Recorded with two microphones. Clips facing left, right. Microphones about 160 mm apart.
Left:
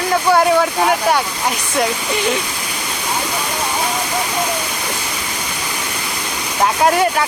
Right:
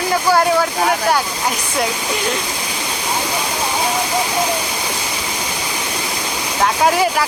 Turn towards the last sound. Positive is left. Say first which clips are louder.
# left 1 dB
turn(degrees=0)  # may be behind; listen again after turning